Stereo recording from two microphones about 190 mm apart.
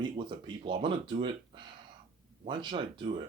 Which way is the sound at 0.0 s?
25° right (ahead or behind).